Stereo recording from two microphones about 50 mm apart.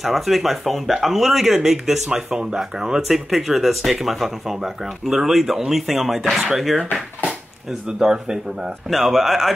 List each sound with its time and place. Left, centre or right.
0.0 s speech: centre
6.9 s speech: right
8.0 s speech: centre